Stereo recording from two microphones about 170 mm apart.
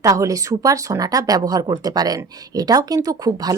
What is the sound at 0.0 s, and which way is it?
Speech, 20° right (ahead or behind).